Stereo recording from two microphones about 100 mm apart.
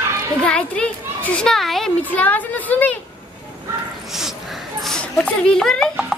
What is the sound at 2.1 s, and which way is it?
Speech, 15° left (ahead or behind).